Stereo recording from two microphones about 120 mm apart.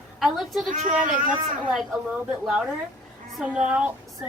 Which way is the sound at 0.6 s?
90° right.